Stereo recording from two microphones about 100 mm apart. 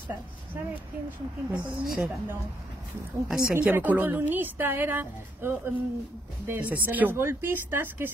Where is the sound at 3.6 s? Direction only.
20° right (ahead or behind).